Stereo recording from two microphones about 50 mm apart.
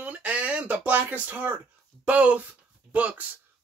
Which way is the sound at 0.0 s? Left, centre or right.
Right.